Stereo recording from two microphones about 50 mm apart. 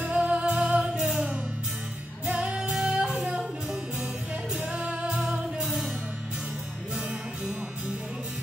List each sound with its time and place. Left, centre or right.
0.0 s music: right
4.6 s music: centre